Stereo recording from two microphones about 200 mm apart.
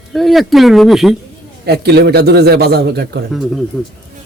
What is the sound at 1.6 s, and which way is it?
A man's voice, 55° right (ahead or behind).